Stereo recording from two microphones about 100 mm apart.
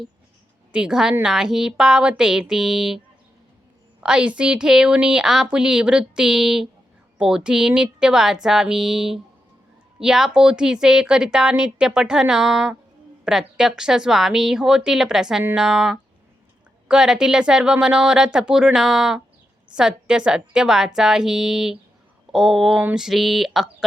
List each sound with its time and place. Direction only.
0.7 s a woman's voice: 5° right (ahead or behind)
4.0 s a woman's voice: 10° right (ahead or behind)